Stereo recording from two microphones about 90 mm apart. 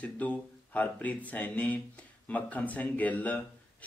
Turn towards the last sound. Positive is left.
turn(degrees=20)  # may be behind; listen again after turning